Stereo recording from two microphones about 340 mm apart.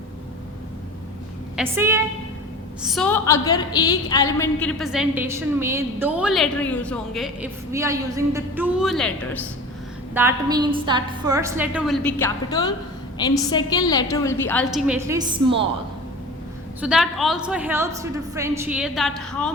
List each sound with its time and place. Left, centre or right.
1.5 s a woman's voice: centre
10.2 s a woman's voice: centre
16.8 s a woman's voice: centre